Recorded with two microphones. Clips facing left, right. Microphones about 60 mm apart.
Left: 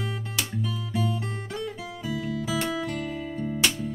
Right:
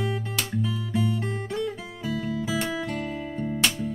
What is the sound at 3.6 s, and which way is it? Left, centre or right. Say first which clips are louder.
Music: even; centre.